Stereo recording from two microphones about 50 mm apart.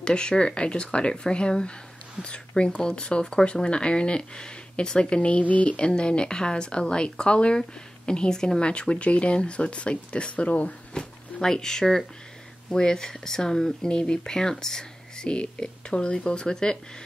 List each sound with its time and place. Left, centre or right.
0.0 s speech: centre
10.9 s speech: centre